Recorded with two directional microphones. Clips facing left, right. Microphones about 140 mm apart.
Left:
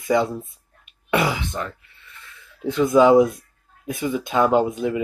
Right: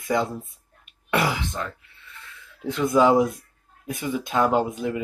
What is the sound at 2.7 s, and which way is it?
Speech, centre (ahead or behind).